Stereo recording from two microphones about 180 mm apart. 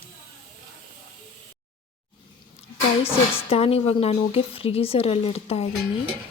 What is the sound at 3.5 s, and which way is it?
Speech, 35° left (ahead or behind).